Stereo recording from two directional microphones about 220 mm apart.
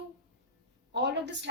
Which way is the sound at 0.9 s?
50° right (ahead or behind).